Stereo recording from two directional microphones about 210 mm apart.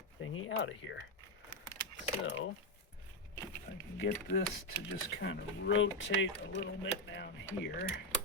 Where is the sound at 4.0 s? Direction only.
60° left (ahead or behind).